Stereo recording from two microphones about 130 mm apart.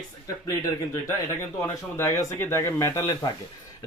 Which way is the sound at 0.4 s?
20° left (ahead or behind).